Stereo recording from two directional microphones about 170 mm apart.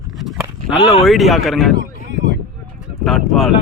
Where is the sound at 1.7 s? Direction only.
90° right.